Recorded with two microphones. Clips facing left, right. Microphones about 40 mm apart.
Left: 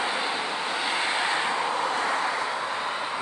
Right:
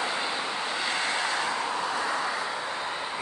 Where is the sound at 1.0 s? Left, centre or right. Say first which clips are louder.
Left 2 dB; centre.